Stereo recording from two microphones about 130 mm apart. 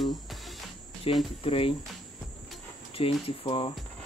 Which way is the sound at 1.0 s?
45° left (ahead or behind).